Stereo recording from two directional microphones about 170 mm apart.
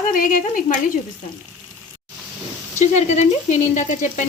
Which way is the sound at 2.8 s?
45° left (ahead or behind).